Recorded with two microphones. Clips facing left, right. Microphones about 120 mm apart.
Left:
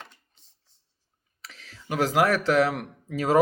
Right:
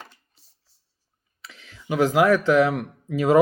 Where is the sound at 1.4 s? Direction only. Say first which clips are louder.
Right 1 dB; 40° left (ahead or behind).